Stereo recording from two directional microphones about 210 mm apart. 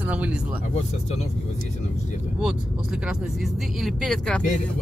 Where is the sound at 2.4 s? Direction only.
Centre (ahead or behind).